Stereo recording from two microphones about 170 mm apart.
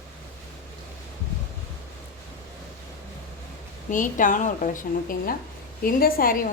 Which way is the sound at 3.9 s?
50° left (ahead or behind).